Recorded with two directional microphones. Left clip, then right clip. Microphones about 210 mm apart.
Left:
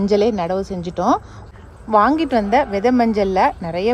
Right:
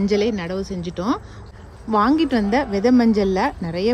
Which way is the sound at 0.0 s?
5° right (ahead or behind).